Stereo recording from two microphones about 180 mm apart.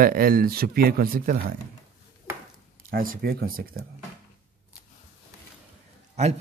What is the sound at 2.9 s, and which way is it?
Speech, 55° right (ahead or behind).